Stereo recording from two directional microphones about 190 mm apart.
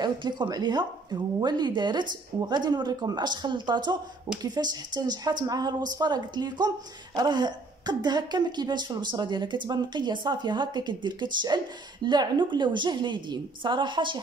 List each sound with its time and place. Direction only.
0.0 s a woman's voice: 20° right (ahead or behind)